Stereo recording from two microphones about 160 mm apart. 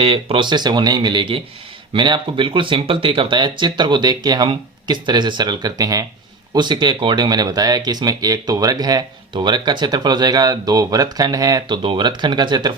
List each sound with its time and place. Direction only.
0.0 s speech: 35° right (ahead or behind)